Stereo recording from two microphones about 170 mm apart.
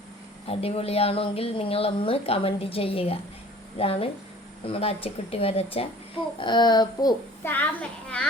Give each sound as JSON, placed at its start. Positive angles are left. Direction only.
{"t": 0.4, "sound": "speech", "side_deg": 35}
{"t": 7.4, "sound": "a child's voice", "side_deg": 10}